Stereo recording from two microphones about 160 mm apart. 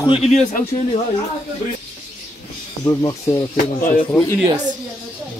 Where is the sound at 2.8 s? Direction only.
20° left (ahead or behind).